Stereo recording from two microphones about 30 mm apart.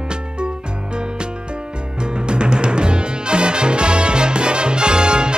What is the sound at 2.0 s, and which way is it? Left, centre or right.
Music, right.